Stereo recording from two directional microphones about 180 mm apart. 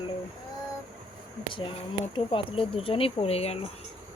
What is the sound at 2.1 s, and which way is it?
Speech, 30° left (ahead or behind).